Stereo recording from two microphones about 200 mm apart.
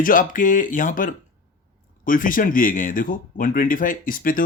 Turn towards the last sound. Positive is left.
turn(degrees=45)  # may be behind; listen again after turning